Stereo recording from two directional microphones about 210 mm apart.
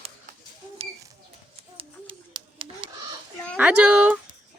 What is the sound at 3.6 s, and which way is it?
Speech, 5° right (ahead or behind).